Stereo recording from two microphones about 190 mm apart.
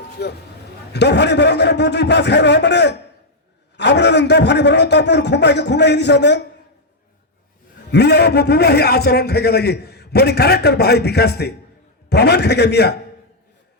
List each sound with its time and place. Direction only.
0.2 s a man's voice: 60° left (ahead or behind)
7.9 s a man's voice: 60° left (ahead or behind)